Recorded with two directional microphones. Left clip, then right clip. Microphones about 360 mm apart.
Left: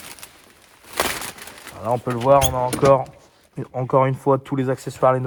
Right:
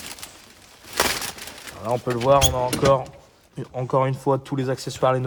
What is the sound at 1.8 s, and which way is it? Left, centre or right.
Speech, centre.